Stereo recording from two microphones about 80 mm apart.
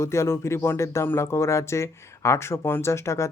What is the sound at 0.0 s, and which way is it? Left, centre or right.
Speech, left.